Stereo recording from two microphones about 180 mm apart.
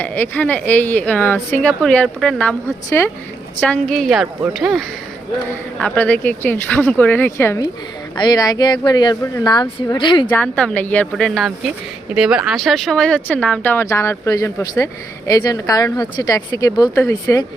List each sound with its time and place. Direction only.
0.0 s a woman's voice: 10° left (ahead or behind); by 10.2 s 25° left (ahead or behind)
10.2 s speech: 10° left (ahead or behind)